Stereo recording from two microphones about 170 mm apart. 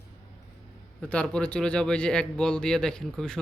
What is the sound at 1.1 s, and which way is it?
Speech, 5° left (ahead or behind).